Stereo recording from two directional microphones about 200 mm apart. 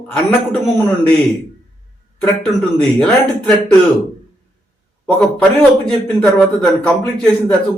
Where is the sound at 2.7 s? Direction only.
5° left (ahead or behind).